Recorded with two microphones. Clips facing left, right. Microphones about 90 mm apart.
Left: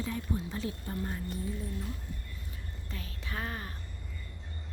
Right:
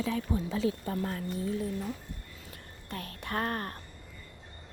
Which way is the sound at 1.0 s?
90° right.